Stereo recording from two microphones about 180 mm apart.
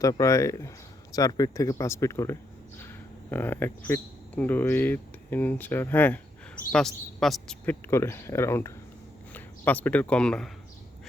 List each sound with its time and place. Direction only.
0.0 s speech: 20° left (ahead or behind)